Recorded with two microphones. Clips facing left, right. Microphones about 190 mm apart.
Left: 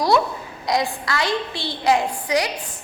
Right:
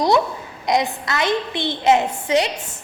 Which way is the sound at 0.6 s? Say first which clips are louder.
Right 2 dB; 20° right (ahead or behind).